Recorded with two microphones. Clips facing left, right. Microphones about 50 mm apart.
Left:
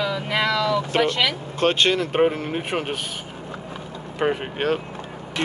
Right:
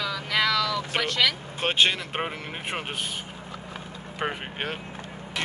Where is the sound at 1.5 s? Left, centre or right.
Centre.